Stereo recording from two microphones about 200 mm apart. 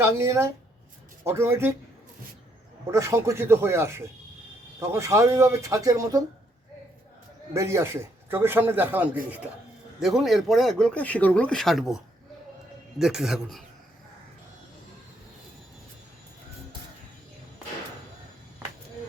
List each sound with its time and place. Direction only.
0.0 s a man's voice: 15° right (ahead or behind)
2.8 s a man's voice: 15° right (ahead or behind)
7.5 s a man's voice: 15° right (ahead or behind)